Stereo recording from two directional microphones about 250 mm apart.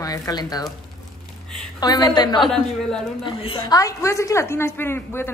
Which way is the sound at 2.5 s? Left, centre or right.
Centre.